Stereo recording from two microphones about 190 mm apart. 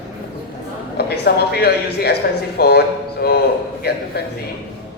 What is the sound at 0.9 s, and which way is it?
A woman's voice, 60° left (ahead or behind).